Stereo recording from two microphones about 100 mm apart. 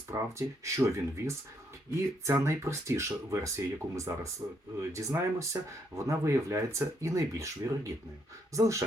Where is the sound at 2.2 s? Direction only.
25° right (ahead or behind).